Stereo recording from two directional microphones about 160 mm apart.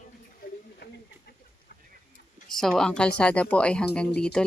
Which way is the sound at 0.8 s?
90° left.